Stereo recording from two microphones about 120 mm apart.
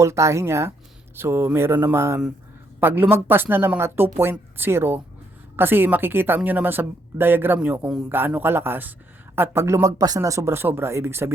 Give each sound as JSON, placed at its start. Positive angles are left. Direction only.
{"t": 0.0, "sound": "a woman's voice", "side_deg": -25}